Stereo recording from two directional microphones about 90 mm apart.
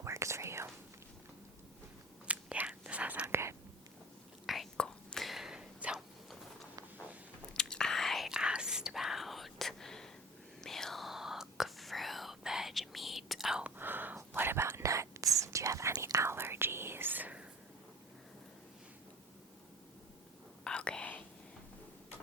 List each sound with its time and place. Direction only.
0.0 s whispering: 35° right (ahead or behind)
2.2 s whispering: 15° right (ahead or behind)
4.4 s whispering: centre (ahead or behind)
7.5 s whispering: 10° left (ahead or behind); by 13.7 s 10° right (ahead or behind)
13.7 s a sound: 20° right (ahead or behind)
14.2 s whispering: 25° right (ahead or behind)
20.7 s whispering: 10° left (ahead or behind)